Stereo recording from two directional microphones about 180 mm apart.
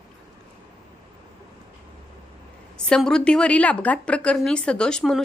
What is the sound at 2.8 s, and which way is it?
A woman's voice, 5° left (ahead or behind).